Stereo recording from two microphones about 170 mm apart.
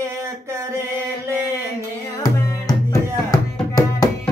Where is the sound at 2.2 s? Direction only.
20° left (ahead or behind).